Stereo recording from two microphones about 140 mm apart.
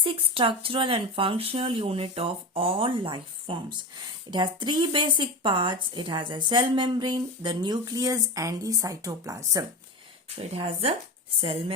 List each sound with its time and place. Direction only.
0.0 s speech: 40° right (ahead or behind); by 9.6 s 25° right (ahead or behind)
10.3 s speech: 45° right (ahead or behind)